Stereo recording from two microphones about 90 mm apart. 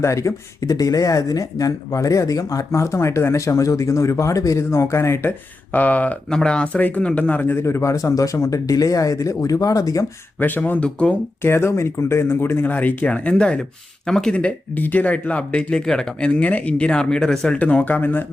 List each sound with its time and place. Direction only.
0.0 s speech: 35° left (ahead or behind)
5.7 s speech: 15° left (ahead or behind); by 10.1 s 40° left (ahead or behind)
10.4 s speech: 20° left (ahead or behind)
11.4 s speech: 25° left (ahead or behind)